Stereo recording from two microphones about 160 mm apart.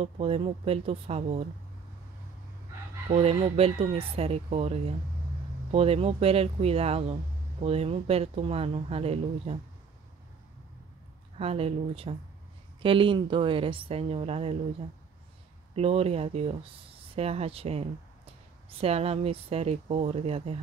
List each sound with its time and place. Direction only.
0.0 s speech: 35° right (ahead or behind)
3.1 s speech: 40° right (ahead or behind)
11.3 s speech: 40° right (ahead or behind)
15.7 s speech: 40° right (ahead or behind)